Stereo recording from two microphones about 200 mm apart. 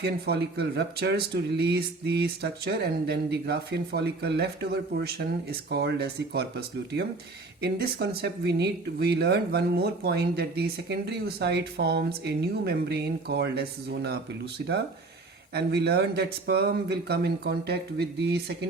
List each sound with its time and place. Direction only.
0.0 s speech: 55° right (ahead or behind)